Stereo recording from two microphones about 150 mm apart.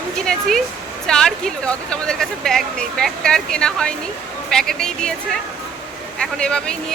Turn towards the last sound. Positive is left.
turn(degrees=5)  # may be behind; listen again after turning